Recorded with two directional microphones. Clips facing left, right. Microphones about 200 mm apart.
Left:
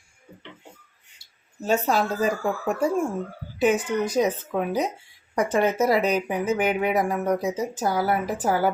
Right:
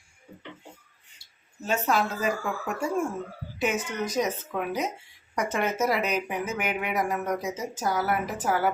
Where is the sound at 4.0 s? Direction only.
30° left (ahead or behind).